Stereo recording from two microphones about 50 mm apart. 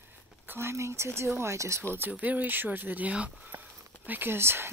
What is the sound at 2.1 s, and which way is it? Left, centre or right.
Speech, right.